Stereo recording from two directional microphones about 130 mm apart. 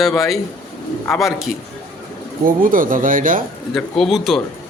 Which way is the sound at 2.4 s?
90° right.